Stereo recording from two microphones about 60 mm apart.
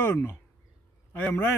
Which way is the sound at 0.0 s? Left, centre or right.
Left.